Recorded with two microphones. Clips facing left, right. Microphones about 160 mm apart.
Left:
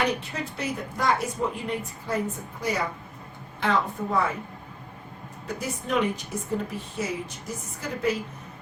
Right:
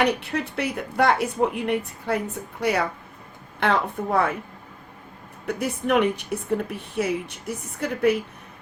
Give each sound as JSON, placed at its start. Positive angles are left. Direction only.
{"t": 0.2, "sound": "speech", "side_deg": -65}
{"t": 5.5, "sound": "speech", "side_deg": -60}